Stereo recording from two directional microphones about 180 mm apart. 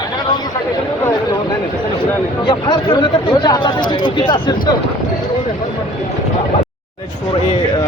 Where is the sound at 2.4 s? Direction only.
25° left (ahead or behind).